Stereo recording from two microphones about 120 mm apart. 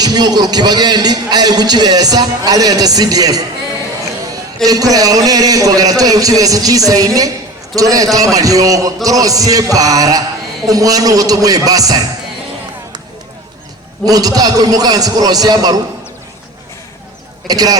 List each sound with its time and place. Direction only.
0.0 s a man's voice: 35° right (ahead or behind)
4.6 s a man's voice: 30° right (ahead or behind)
14.0 s a man's voice: 30° right (ahead or behind)
17.5 s a man's voice: 30° right (ahead or behind)